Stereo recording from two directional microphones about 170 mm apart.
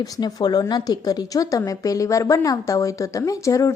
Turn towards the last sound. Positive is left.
turn(degrees=20)  # may be behind; listen again after turning